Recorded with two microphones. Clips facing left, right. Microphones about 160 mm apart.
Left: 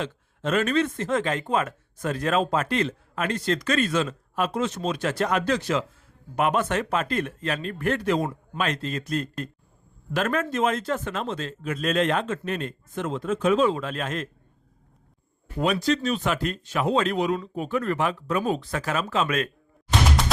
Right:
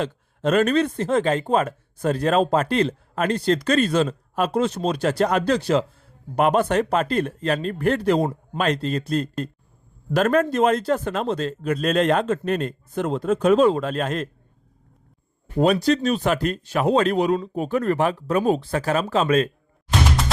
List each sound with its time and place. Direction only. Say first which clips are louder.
0.0 s speech: right 6 dB; 40° right (ahead or behind)
15.5 s speech: right 5 dB; 35° right (ahead or behind)
19.9 s a sound: right 1 dB; centre (ahead or behind)